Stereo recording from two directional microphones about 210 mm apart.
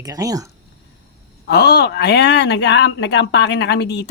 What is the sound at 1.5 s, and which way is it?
Speech, 50° left (ahead or behind).